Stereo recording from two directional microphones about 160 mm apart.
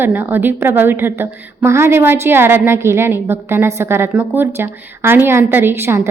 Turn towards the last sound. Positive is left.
turn(degrees=-15)  # may be behind; listen again after turning